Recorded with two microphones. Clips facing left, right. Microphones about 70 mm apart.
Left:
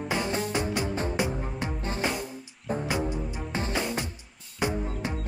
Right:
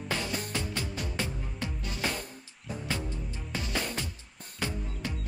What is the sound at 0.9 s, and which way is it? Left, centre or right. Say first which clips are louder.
Music: left 7 dB; left.